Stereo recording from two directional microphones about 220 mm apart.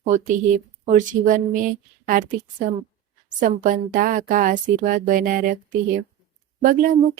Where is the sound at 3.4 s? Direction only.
40° right (ahead or behind).